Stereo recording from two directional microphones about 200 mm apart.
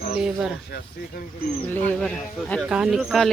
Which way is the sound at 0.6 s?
50° left (ahead or behind).